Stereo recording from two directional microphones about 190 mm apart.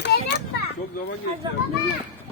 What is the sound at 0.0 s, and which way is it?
Children playing, 65° left (ahead or behind).